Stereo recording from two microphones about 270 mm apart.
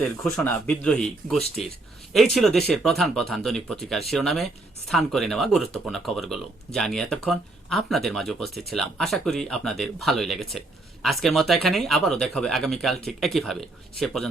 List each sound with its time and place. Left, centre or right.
0.3 s speech: centre